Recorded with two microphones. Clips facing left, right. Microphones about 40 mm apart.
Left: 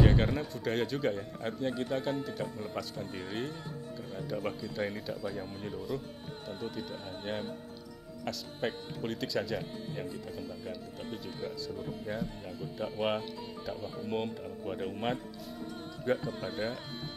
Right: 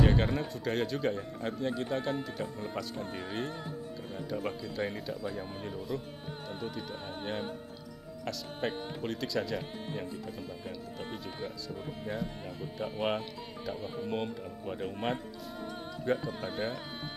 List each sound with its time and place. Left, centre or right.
0.0 s speech: centre
8.3 s speech: centre
11.1 s speech: centre
13.7 s speech: right
14.0 s speech: centre
16.3 s speech: centre